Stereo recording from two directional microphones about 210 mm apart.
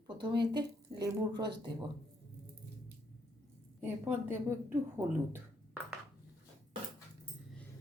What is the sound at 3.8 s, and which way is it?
A woman's voice, 10° right (ahead or behind).